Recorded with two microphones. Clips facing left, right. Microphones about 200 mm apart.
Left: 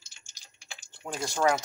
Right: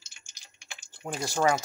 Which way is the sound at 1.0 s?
15° right (ahead or behind).